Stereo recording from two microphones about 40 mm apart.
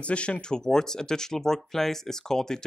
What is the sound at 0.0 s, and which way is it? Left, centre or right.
Speech, left.